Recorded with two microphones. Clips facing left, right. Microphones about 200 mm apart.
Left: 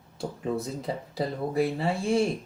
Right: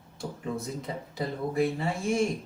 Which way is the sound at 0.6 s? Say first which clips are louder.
Left 3 dB; 35° left (ahead or behind).